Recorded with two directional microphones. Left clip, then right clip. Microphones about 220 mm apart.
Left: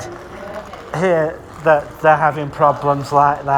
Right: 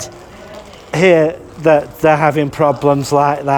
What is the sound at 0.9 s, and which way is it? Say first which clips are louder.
A man's voice: right 6 dB; 45° right (ahead or behind).